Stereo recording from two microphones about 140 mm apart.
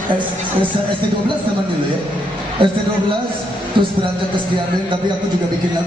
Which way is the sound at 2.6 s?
40° right (ahead or behind).